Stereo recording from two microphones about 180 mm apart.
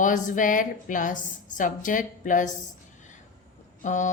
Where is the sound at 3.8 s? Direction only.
45° left (ahead or behind).